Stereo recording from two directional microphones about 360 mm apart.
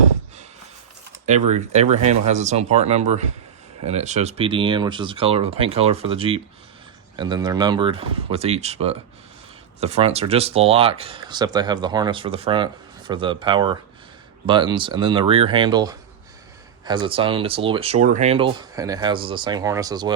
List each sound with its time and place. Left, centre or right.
1.5 s speech: centre